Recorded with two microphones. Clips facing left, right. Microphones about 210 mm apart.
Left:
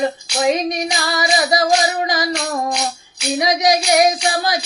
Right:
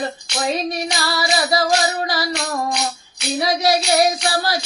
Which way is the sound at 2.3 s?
Centre (ahead or behind).